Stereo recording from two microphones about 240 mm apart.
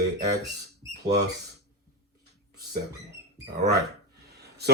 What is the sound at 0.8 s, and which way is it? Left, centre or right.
Rodents, centre.